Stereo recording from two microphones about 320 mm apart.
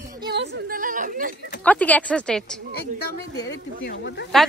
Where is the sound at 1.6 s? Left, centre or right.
Centre.